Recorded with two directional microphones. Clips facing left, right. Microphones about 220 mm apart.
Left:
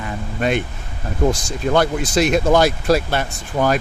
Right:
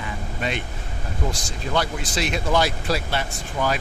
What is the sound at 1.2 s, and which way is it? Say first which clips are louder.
Speech: left 11 dB; 50° left (ahead or behind).